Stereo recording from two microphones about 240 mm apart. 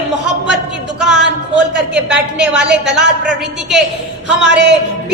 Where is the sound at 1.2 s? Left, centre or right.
Right.